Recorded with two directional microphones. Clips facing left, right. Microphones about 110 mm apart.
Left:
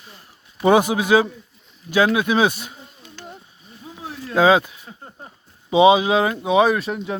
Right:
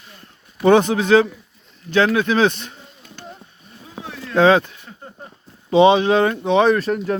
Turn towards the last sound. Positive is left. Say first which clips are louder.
# right 4 dB
turn(degrees=5)  # may be behind; listen again after turning